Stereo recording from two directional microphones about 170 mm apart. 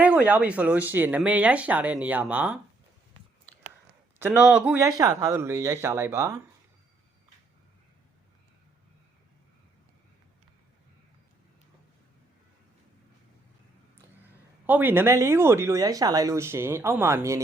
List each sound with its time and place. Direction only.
0.0 s speech: 10° right (ahead or behind)
4.2 s speech: 10° right (ahead or behind)
4.8 s speech: 20° right (ahead or behind)
14.7 s speech: 10° right (ahead or behind)